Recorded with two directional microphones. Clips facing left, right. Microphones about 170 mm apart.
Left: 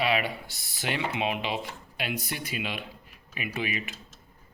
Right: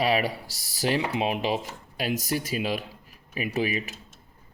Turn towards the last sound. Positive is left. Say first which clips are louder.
# right 5 dB
turn(degrees=-35)  # may be behind; listen again after turning